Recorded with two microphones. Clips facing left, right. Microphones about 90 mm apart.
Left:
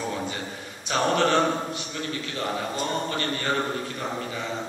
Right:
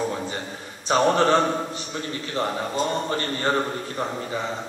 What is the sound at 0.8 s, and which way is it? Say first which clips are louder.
Speech: right 4 dB; 30° right (ahead or behind).